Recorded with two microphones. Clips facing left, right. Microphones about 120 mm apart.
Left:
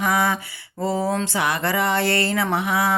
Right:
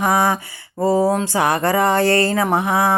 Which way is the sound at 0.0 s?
40° right (ahead or behind).